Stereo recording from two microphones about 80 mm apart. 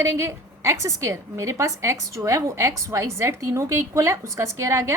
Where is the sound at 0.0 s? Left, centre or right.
Right.